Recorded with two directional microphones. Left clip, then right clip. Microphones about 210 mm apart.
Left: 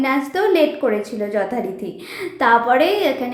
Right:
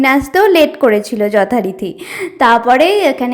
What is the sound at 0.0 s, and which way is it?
A woman's voice, 40° right (ahead or behind).